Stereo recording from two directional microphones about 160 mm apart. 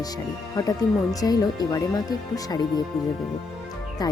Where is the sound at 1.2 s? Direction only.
25° left (ahead or behind).